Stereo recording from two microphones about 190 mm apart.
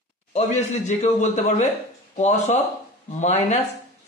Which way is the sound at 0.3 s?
40° left (ahead or behind).